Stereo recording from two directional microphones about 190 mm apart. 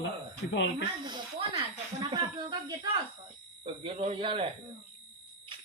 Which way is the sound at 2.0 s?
25° right (ahead or behind).